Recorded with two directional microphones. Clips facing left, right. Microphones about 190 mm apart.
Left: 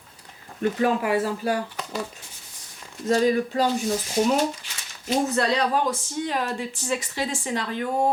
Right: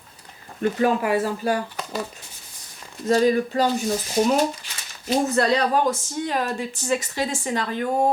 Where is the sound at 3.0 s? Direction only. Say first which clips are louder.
Right 2 dB; 40° right (ahead or behind).